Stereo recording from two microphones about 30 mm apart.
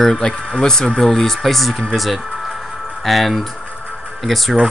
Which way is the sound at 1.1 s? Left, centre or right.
Centre.